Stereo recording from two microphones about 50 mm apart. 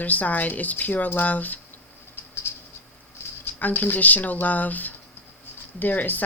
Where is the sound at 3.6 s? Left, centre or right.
Left.